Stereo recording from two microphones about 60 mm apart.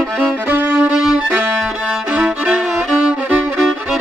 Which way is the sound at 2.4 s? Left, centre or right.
Centre.